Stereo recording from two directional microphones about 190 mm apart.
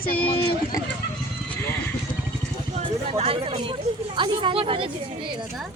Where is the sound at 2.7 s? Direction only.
30° right (ahead or behind).